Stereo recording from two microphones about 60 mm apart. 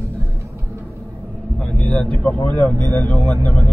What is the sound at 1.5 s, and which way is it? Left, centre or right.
Speech, left.